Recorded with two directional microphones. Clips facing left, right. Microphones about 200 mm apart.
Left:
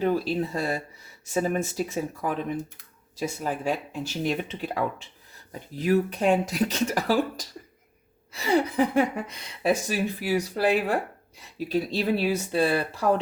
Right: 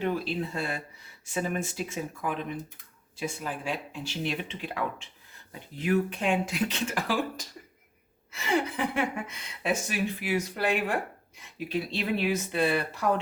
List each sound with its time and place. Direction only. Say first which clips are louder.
0.0 s speech: left 5 dB; 40° left (ahead or behind)